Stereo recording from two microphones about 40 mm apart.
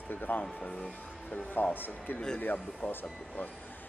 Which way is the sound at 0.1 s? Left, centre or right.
Left.